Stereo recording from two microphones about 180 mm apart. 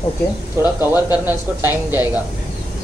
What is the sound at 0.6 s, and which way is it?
Speech, 10° right (ahead or behind).